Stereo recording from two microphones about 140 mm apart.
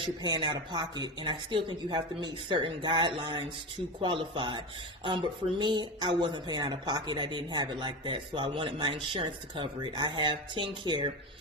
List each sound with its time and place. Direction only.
0.0 s speech: 30° right (ahead or behind)